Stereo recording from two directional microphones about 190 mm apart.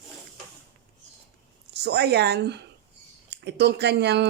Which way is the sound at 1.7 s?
60° right (ahead or behind).